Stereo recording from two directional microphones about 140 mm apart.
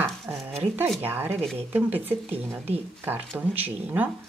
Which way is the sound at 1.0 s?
15° right (ahead or behind).